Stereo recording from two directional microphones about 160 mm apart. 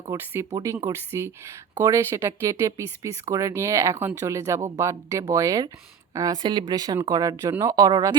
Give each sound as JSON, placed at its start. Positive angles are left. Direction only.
{"t": 0.0, "sound": "speech", "side_deg": -20}